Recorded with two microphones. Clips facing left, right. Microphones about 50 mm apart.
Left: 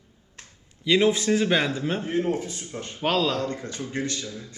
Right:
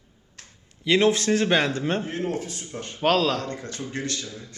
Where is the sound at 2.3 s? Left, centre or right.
Right.